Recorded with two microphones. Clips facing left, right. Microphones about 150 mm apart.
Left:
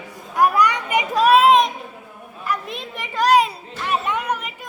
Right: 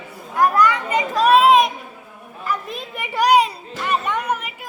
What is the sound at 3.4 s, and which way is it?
Music, centre (ahead or behind).